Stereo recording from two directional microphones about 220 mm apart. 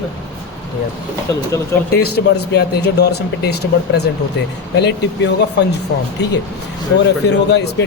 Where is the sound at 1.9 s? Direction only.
45° left (ahead or behind).